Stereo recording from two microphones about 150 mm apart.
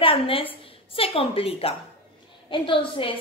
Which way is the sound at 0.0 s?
35° left (ahead or behind).